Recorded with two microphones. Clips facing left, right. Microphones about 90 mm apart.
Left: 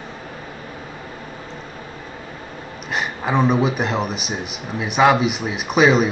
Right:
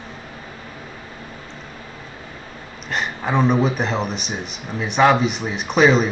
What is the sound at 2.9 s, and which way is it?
A man's voice, 5° left (ahead or behind).